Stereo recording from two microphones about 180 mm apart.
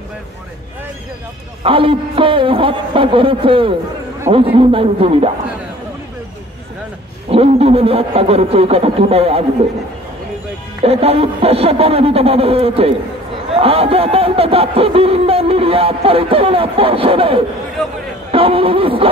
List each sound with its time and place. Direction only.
1.6 s a man's voice: 30° right (ahead or behind)
7.2 s speech: 35° right (ahead or behind)
10.8 s speech: 35° right (ahead or behind)